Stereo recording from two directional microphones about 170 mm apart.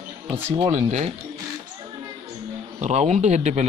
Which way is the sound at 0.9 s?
40° right (ahead or behind).